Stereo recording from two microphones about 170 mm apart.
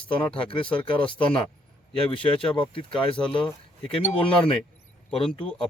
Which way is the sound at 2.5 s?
30° left (ahead or behind).